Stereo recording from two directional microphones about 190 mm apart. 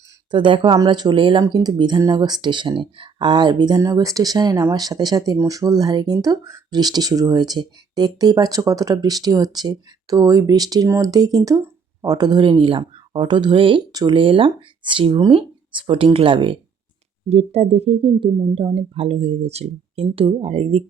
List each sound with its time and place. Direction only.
0.3 s speech: 25° right (ahead or behind)